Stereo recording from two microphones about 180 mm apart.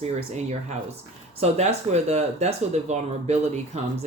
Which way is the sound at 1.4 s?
40° right (ahead or behind).